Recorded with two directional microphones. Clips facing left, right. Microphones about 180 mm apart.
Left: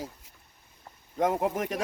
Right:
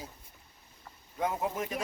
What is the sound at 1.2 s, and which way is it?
Speech, 70° left (ahead or behind).